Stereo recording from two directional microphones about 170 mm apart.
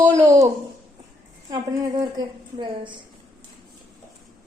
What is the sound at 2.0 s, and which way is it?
Speech, 25° right (ahead or behind).